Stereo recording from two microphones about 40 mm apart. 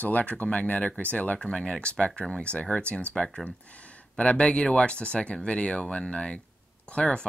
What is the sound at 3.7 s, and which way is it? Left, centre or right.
Speech, left.